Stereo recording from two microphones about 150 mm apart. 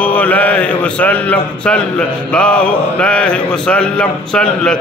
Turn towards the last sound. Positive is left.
turn(degrees=5)  # may be behind; listen again after turning